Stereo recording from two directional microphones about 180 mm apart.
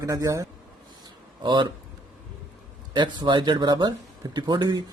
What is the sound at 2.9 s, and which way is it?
Speech, 25° right (ahead or behind).